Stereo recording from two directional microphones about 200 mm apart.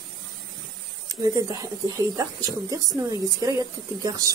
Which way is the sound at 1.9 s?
15° right (ahead or behind).